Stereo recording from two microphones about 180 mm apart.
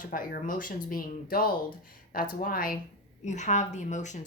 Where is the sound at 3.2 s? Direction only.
40° left (ahead or behind).